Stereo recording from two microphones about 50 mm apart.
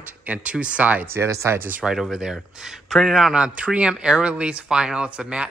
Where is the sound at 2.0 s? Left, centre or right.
Centre.